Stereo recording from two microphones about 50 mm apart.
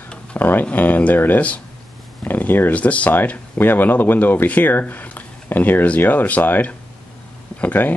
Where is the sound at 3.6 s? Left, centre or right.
Left.